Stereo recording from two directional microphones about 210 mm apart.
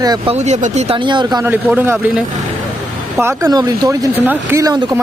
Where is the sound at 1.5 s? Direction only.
10° right (ahead or behind).